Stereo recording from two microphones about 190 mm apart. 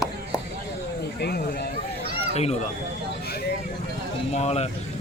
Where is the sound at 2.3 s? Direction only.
35° left (ahead or behind).